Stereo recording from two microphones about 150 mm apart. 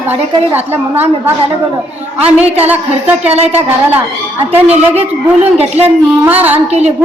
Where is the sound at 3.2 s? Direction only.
45° right (ahead or behind).